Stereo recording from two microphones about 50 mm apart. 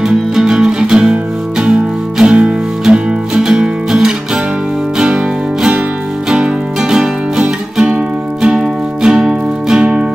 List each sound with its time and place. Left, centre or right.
0.4 s music: centre